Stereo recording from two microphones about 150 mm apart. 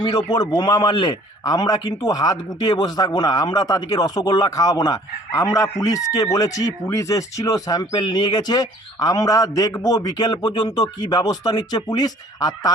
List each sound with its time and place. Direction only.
0.0 s a man's voice: 30° left (ahead or behind)